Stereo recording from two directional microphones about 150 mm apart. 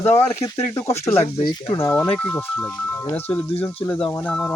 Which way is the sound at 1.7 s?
15° left (ahead or behind).